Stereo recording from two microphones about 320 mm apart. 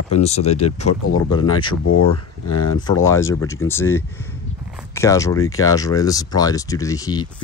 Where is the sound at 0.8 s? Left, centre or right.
Left.